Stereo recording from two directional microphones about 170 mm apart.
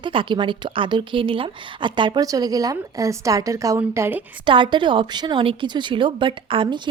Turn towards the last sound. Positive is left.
turn(degrees=-30)  # may be behind; listen again after turning